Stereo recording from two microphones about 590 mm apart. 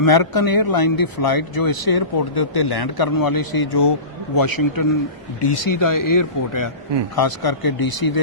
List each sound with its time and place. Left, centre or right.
0.0 s speech: left